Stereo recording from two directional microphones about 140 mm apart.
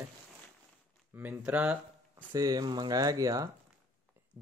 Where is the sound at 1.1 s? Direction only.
10° right (ahead or behind).